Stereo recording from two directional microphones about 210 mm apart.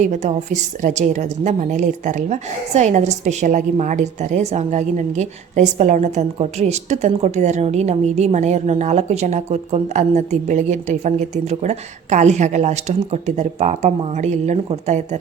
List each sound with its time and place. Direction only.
0.0 s a woman's voice: 35° right (ahead or behind)